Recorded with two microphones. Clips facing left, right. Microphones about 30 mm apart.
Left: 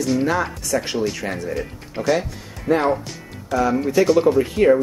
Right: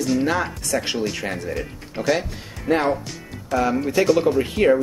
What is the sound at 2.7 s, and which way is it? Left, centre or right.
Speech, right.